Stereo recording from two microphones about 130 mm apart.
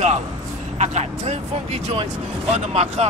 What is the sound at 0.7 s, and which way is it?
A man's voice, 60° right (ahead or behind).